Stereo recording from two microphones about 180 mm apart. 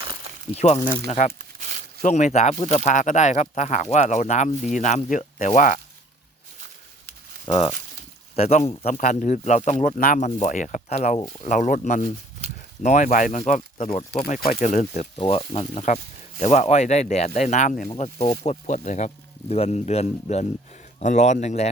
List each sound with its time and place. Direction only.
0.0 s a sound: 25° right (ahead or behind)
0.5 s speech: 35° left (ahead or behind)
1.4 s a sound: 45° right (ahead or behind)
2.0 s speech: 40° left (ahead or behind)
7.4 s speech: 30° left (ahead or behind); by 12.0 s 45° left (ahead or behind)
12.4 s a sound: 35° right (ahead or behind)
12.8 s speech: 45° left (ahead or behind)
14.1 s speech: 30° left (ahead or behind)
14.3 s speech: 45° left (ahead or behind)
15.2 s speech: 35° left (ahead or behind)